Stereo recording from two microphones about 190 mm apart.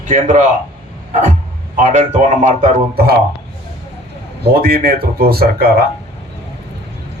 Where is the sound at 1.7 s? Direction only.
40° right (ahead or behind).